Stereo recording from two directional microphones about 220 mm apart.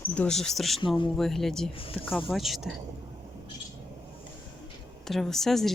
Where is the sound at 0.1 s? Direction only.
5° left (ahead or behind).